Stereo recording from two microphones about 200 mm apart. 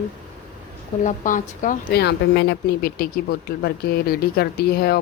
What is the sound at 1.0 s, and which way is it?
Speech, 40° left (ahead or behind).